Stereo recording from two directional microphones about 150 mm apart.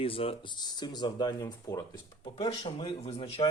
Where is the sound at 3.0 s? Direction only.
45° left (ahead or behind).